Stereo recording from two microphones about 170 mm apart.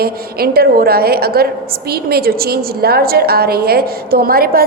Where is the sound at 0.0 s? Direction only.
65° right (ahead or behind).